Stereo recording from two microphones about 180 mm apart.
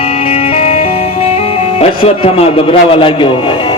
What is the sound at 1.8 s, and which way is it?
A man's voice, 35° left (ahead or behind).